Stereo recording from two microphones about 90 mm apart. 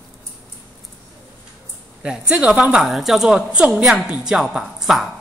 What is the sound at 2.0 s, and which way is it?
A woman's voice, 10° right (ahead or behind).